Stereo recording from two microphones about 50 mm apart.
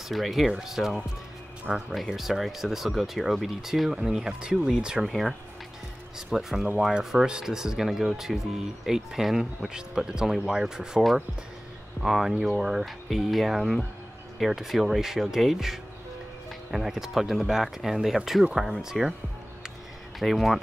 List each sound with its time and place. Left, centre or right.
0.1 s speech: centre
4.3 s speech: centre
5.0 s speech: centre
6.1 s speech: centre
20.2 s speech: centre